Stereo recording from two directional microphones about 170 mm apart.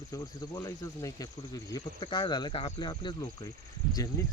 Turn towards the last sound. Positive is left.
turn(degrees=20)  # may be behind; listen again after turning